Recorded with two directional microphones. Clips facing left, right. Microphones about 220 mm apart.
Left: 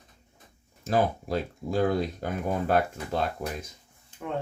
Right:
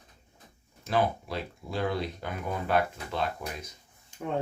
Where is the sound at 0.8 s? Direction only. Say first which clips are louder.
Left 2 dB; 45° left (ahead or behind).